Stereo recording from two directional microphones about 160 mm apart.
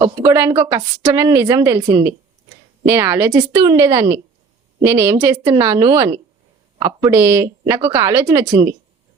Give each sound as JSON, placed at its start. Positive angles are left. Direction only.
{"t": 0.0, "sound": "a woman's voice", "side_deg": -20}
{"t": 7.1, "sound": "a woman's voice", "side_deg": -15}